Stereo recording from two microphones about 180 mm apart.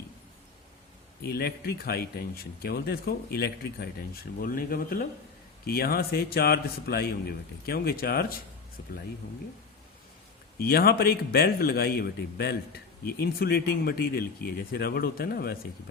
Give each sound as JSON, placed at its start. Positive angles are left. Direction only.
{"t": 1.2, "sound": "speech", "side_deg": 60}
{"t": 10.6, "sound": "speech", "side_deg": 60}